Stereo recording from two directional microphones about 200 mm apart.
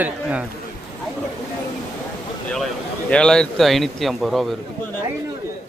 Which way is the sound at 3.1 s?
5° left (ahead or behind).